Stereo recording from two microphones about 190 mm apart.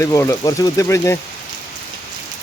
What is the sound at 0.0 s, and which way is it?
Speech, 15° left (ahead or behind).